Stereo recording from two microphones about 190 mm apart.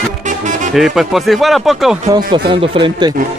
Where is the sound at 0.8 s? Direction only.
Centre (ahead or behind).